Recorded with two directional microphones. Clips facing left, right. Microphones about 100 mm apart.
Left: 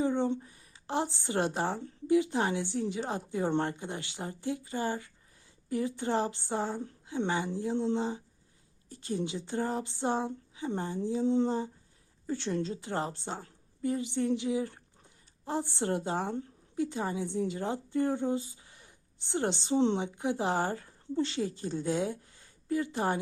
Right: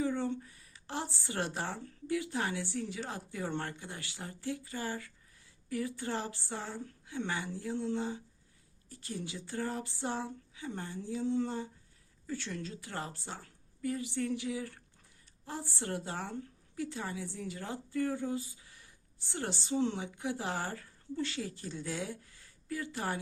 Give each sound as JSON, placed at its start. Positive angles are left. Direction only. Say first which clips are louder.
{"t": 0.0, "sound": "a woman's voice", "louder": "left 4 dB", "side_deg": 20}